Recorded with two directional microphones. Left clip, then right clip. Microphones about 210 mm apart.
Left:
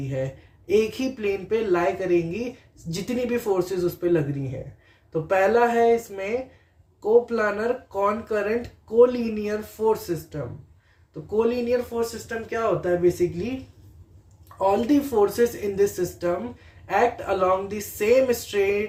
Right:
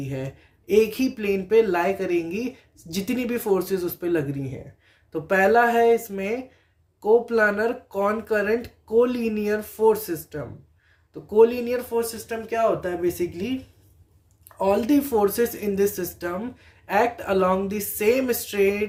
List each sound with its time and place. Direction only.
0.7 s speech: 50° right (ahead or behind)
5.3 s speech: 55° right (ahead or behind)
14.6 s speech: 50° right (ahead or behind)